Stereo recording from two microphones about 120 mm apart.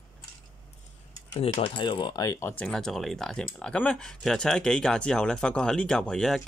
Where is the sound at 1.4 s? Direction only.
50° left (ahead or behind); by 2.6 s 25° left (ahead or behind).